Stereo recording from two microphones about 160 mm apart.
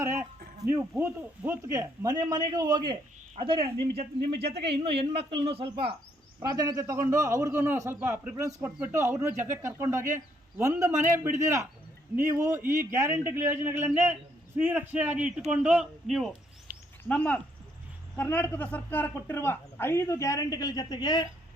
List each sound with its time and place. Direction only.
0.0 s speech: 15° right (ahead or behind); by 6.0 s 35° right (ahead or behind)
6.6 s speech: 20° right (ahead or behind); by 16.3 s centre (ahead or behind)
17.0 s speech: 10° left (ahead or behind); by 21.2 s 25° left (ahead or behind)